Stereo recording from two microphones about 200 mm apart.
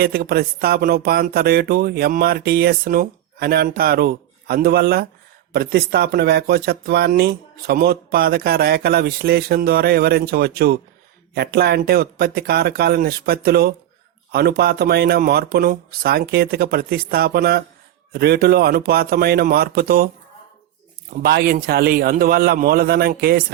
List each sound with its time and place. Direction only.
0.0 s speech: 50° right (ahead or behind)
21.2 s speech: 50° right (ahead or behind)